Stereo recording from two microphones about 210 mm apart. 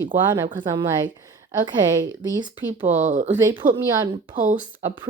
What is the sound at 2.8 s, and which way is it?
Speech, 35° right (ahead or behind).